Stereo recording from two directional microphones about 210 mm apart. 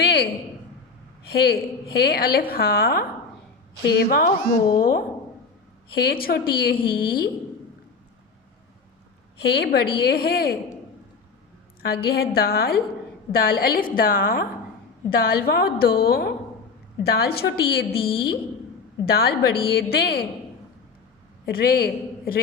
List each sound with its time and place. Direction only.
0.0 s a sound: 50° left (ahead or behind)
1.3 s a woman's voice: 45° left (ahead or behind)
9.4 s a woman's voice: 50° left (ahead or behind)
11.8 s a woman's voice: 50° left (ahead or behind)
21.4 s a man's voice: 45° left (ahead or behind)